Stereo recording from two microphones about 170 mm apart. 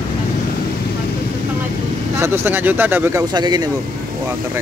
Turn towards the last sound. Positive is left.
turn(degrees=-25)  # may be behind; listen again after turning